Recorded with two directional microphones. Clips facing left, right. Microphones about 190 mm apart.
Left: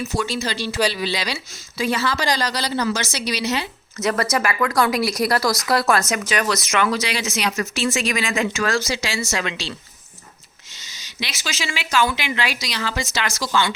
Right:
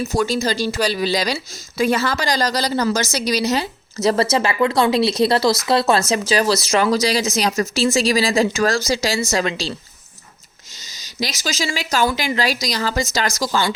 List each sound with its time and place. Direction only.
0.0 s a woman's voice: 40° right (ahead or behind)
10.8 s a woman's voice: 40° right (ahead or behind)